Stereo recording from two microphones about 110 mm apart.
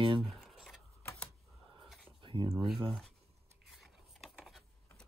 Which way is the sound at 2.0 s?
50° right (ahead or behind).